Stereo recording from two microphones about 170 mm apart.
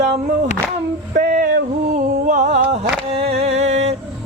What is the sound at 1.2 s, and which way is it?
Music, 50° right (ahead or behind).